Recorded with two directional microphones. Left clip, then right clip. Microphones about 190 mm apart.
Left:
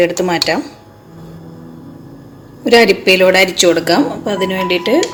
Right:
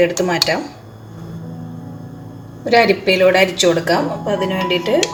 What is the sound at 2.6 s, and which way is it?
Speech, 45° left (ahead or behind).